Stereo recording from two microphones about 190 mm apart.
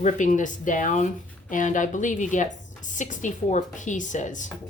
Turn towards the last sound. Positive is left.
turn(degrees=40)  # may be behind; listen again after turning